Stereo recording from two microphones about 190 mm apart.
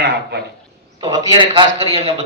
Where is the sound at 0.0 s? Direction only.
60° right (ahead or behind).